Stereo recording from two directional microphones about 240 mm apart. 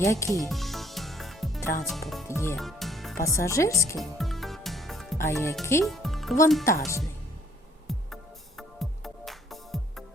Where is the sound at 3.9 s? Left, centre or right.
Centre.